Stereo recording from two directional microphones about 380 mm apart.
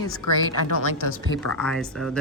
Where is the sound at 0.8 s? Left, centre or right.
Left.